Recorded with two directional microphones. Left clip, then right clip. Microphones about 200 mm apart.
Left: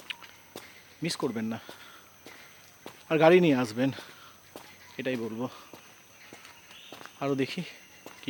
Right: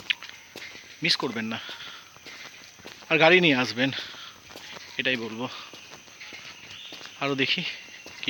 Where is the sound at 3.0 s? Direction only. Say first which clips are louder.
Right 2 dB; 10° left (ahead or behind).